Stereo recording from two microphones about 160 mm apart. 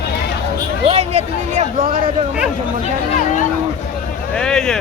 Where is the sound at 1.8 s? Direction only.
60° right (ahead or behind).